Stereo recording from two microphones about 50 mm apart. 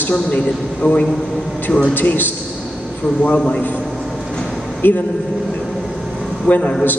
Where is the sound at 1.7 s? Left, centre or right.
Centre.